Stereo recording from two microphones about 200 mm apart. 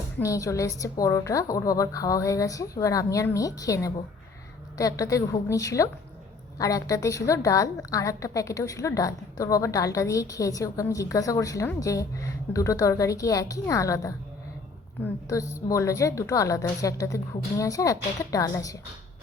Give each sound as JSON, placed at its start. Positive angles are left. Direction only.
{"t": 0.2, "sound": "a woman's voice", "side_deg": 15}